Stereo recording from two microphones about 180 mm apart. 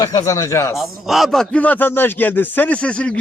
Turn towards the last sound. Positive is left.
turn(degrees=5)  # may be behind; listen again after turning